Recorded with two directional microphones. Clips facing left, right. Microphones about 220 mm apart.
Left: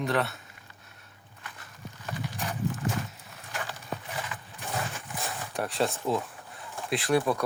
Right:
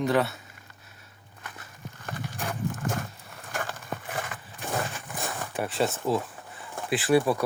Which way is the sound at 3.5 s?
50° right (ahead or behind).